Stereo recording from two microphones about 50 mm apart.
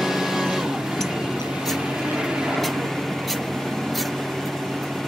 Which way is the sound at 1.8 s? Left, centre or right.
Centre.